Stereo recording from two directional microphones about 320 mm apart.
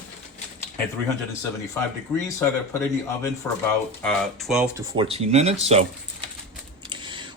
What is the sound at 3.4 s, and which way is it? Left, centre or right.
Speech, centre.